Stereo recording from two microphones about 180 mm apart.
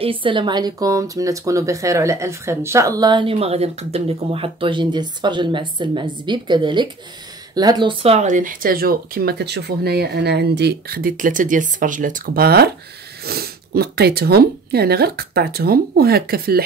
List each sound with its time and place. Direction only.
0.0 s speech: 30° right (ahead or behind); by 16.6 s 60° right (ahead or behind)